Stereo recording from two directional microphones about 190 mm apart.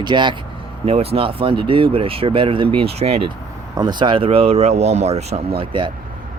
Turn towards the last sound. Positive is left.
turn(degrees=-25)  # may be behind; listen again after turning